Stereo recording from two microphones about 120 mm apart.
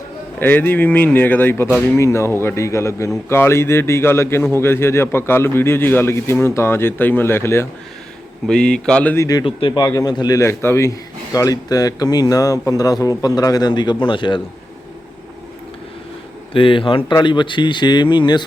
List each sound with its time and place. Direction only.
0.3 s a man's voice: 15° left (ahead or behind)
8.4 s speech: 5° left (ahead or behind)
9.1 s a man's voice: 30° left (ahead or behind)
9.4 s speech: 45° left (ahead or behind)
16.5 s speech: 45° left (ahead or behind)